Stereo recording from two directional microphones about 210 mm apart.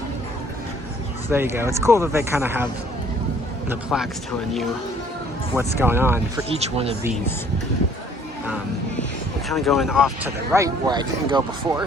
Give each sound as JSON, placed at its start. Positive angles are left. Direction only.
{"t": 1.3, "sound": "speech", "side_deg": -10}
{"t": 3.7, "sound": "speech", "side_deg": -5}
{"t": 5.5, "sound": "speech", "side_deg": -10}
{"t": 6.6, "sound": "speech", "side_deg": -30}
{"t": 9.5, "sound": "speech", "side_deg": 0}
{"t": 10.5, "sound": "speech", "side_deg": -15}